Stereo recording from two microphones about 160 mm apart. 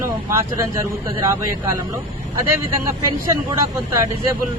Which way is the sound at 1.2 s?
20° right (ahead or behind).